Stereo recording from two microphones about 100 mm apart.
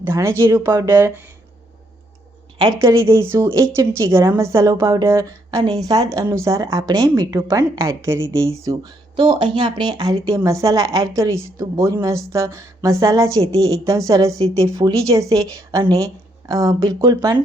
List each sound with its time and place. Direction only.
0.0 s speech: 30° right (ahead or behind)
2.7 s speech: 30° right (ahead or behind)
8.8 s speech: 45° right (ahead or behind)
9.3 s speech: 55° right (ahead or behind); by 17.3 s 40° right (ahead or behind)